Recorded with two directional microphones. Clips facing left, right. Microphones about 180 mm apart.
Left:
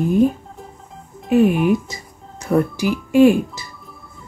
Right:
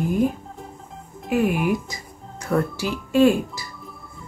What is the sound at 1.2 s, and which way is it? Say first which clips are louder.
Speech: left 6 dB; 25° left (ahead or behind).